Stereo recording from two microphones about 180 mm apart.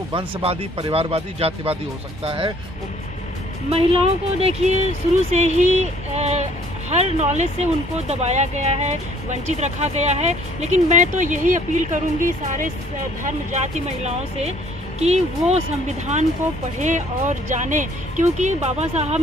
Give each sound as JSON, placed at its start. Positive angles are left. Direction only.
{"t": 0.4, "sound": "speech", "side_deg": -35}
{"t": 3.7, "sound": "speech", "side_deg": -35}
{"t": 16.8, "sound": "speech", "side_deg": -40}